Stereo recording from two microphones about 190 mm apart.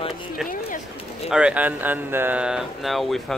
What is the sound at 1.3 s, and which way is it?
Speech, 5° right (ahead or behind).